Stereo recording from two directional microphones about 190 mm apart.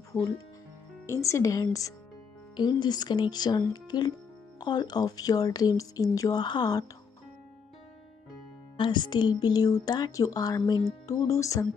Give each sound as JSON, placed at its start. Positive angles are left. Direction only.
{"t": 0.1, "sound": "a woman's voice", "side_deg": 10}
{"t": 8.7, "sound": "speech", "side_deg": 25}